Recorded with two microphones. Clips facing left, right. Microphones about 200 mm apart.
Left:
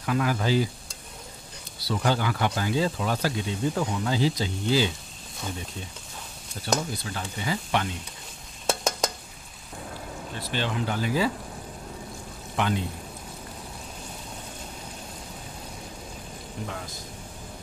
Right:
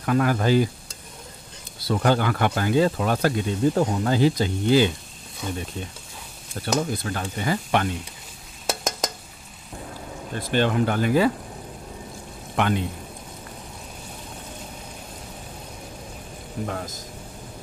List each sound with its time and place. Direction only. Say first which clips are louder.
0.0 s speech: right 5 dB; 50° right (ahead or behind)
1.8 s speech: right 5 dB; 55° right (ahead or behind)
6.6 s speech: right 4 dB; 55° right (ahead or behind)
10.4 s speech: right 8 dB; 50° right (ahead or behind)
12.5 s a man's voice: right 4 dB; 60° right (ahead or behind)
16.6 s speech: right 6 dB; 45° right (ahead or behind)